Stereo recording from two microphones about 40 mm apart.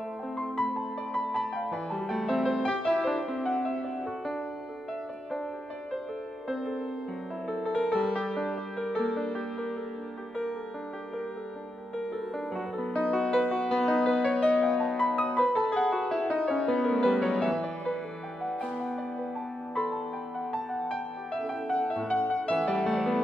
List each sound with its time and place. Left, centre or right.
1.1 s music: centre
6.5 s music: centre
7.4 s music: left
12.5 s music: centre
20.5 s music: centre
22.6 s music: centre